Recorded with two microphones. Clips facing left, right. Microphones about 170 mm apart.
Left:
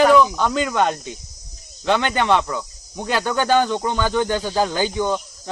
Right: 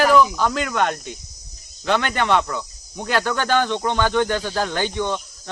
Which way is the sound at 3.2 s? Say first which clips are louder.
Left 3 dB; 20° left (ahead or behind).